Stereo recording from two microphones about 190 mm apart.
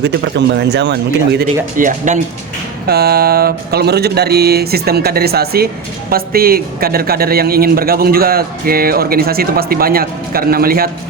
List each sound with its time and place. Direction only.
0.0 s speech: 65° right (ahead or behind)
1.7 s speech: 45° right (ahead or behind)
2.8 s speech: 55° right (ahead or behind)